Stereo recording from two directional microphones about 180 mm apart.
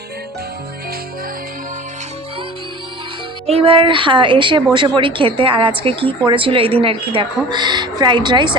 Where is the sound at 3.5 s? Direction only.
30° right (ahead or behind).